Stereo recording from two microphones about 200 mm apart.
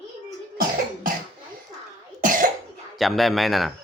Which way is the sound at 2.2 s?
40° right (ahead or behind).